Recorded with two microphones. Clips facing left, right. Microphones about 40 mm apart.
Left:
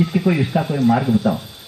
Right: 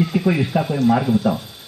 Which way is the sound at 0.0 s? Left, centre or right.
Centre.